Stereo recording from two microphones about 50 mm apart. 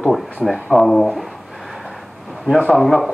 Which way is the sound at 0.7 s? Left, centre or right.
Centre.